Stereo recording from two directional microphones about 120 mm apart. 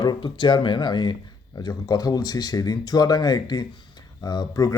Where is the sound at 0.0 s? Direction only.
40° left (ahead or behind).